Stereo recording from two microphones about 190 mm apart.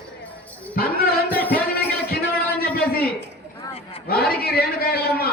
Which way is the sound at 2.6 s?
55° left (ahead or behind).